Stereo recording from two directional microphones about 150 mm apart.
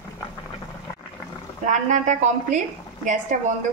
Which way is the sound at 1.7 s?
55° right (ahead or behind).